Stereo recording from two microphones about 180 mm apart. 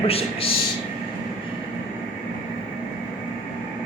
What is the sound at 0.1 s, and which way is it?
Speech, 30° left (ahead or behind).